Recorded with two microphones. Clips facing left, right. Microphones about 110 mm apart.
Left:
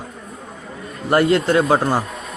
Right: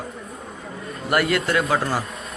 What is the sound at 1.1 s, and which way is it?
Speech, 25° left (ahead or behind).